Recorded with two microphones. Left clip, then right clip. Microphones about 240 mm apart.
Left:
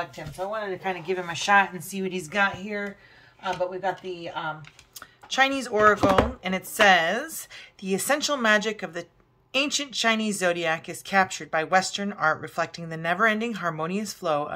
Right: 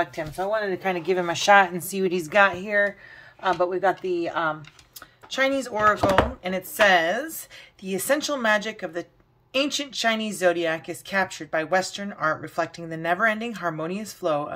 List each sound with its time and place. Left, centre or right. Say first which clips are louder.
0.1 s speech: right 5 dB; centre
5.3 s speech: left 1 dB; centre